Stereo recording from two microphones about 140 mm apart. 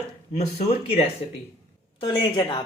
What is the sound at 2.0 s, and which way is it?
Speech, 30° left (ahead or behind).